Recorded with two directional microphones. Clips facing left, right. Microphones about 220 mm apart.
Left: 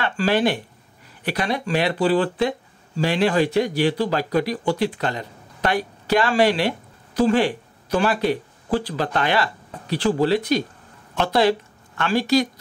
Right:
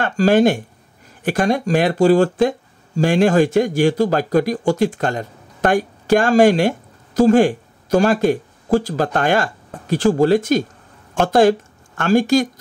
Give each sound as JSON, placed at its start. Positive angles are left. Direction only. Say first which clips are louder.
{"t": 0.0, "sound": "speech", "louder": "right 6 dB", "side_deg": -45}